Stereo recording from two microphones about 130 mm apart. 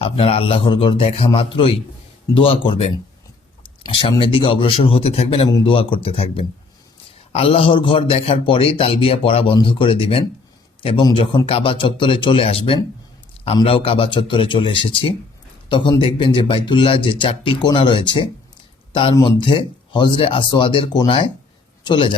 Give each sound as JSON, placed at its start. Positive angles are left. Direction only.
{"t": 0.0, "sound": "a man's voice", "side_deg": 50}
{"t": 5.5, "sound": "a man's voice", "side_deg": 30}
{"t": 5.7, "sound": "a man's voice", "side_deg": 45}